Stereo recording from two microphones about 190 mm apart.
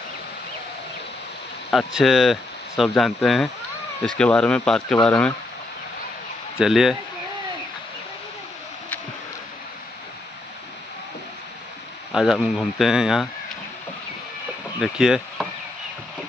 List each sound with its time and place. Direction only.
2.0 s speech: centre (ahead or behind)
6.6 s speech: centre (ahead or behind)
12.1 s speech: centre (ahead or behind)
14.8 s speech: 5° right (ahead or behind)